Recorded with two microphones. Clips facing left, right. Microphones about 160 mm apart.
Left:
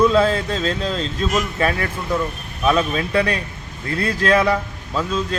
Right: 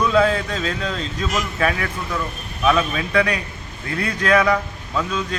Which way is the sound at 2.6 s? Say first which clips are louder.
Left 1 dB; 30° left (ahead or behind).